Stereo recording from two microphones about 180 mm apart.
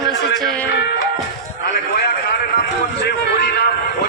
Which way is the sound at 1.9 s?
65° left (ahead or behind).